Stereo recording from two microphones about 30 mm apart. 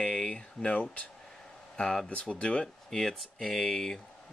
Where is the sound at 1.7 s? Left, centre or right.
Left.